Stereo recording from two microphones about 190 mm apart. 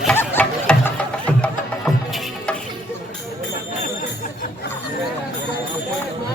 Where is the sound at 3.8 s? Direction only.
45° left (ahead or behind).